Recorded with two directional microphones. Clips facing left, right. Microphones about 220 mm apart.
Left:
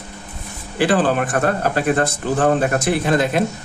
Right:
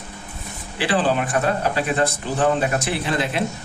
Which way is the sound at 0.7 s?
45° left (ahead or behind).